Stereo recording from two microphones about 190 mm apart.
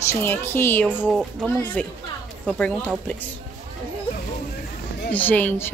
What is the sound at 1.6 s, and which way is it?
A woman's voice, 10° left (ahead or behind).